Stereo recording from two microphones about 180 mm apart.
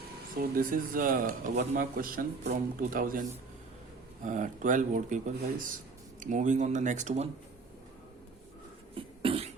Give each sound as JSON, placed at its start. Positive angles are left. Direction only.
{"t": 0.3, "sound": "speech", "side_deg": -50}
{"t": 9.0, "sound": "cough", "side_deg": -30}